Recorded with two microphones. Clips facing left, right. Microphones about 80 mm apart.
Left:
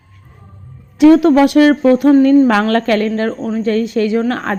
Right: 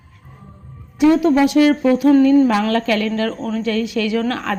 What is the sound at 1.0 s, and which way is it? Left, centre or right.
A woman's voice, left.